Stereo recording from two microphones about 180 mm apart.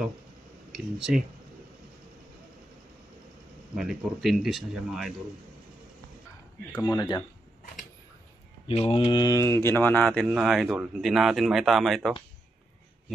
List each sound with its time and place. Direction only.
0.7 s speech: centre (ahead or behind)
3.7 s speech: centre (ahead or behind)
6.8 s speech: 20° left (ahead or behind)
8.6 s speech: 30° left (ahead or behind); by 12.2 s centre (ahead or behind)